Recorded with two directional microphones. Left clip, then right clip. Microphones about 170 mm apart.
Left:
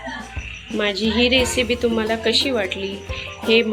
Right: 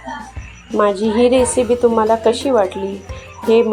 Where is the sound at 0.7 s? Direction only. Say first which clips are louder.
Right 8 dB; centre (ahead or behind).